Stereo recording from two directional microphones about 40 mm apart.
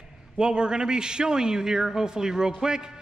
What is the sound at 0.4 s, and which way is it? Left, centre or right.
A man's voice, right.